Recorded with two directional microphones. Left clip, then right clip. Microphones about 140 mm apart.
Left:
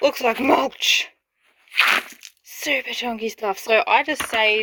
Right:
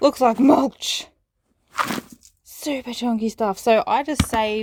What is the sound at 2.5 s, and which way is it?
Speech, 25° right (ahead or behind).